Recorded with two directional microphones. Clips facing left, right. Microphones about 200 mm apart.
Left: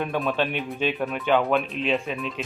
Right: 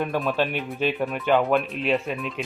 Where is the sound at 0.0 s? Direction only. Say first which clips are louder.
Right 1 dB; 5° right (ahead or behind).